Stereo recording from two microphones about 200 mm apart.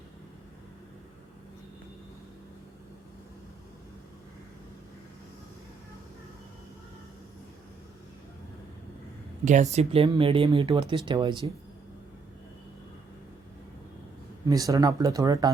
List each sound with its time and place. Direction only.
9.4 s speech: 35° right (ahead or behind)
14.4 s speech: 15° right (ahead or behind)